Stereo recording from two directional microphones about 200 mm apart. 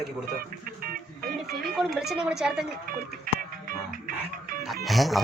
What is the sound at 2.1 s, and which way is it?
Speech, 5° right (ahead or behind).